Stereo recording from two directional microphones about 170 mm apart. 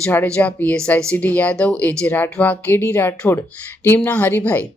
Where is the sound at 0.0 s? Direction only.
10° left (ahead or behind).